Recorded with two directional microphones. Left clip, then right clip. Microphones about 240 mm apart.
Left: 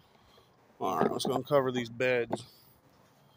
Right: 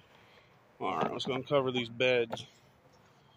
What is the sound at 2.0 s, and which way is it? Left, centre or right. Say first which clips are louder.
Speech: right 1 dB; left.